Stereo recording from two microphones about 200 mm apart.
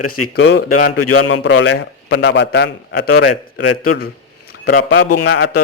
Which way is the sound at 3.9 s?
50° left (ahead or behind).